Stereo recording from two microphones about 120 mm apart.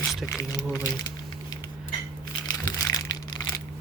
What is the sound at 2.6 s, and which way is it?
Crushing, 30° left (ahead or behind).